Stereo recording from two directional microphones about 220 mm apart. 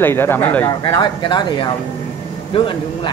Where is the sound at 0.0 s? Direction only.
10° left (ahead or behind).